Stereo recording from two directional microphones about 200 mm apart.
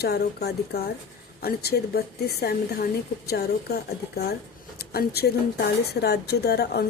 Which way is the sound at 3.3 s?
55° left (ahead or behind).